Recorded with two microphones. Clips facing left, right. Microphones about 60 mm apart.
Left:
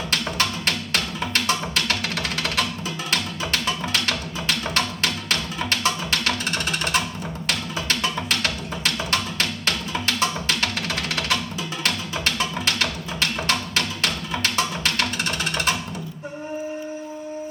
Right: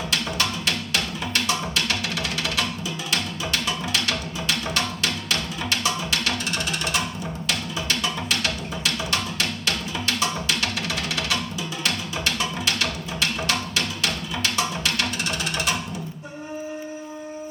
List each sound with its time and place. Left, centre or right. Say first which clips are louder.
0.1 s music: left 2 dB; left